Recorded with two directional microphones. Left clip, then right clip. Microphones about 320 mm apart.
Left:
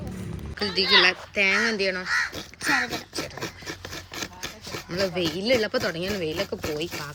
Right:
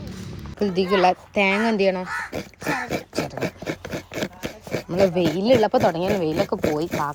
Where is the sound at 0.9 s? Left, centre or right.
Right.